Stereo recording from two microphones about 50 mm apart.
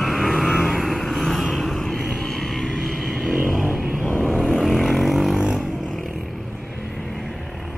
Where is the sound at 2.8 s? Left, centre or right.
Centre.